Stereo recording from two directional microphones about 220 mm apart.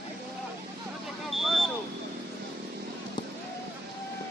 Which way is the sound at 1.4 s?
Centre (ahead or behind).